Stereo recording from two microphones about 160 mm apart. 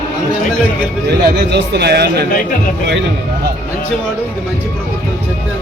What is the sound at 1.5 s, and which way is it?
Speech, 90° right.